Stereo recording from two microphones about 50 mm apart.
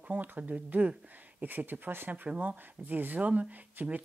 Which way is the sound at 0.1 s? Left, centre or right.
Right.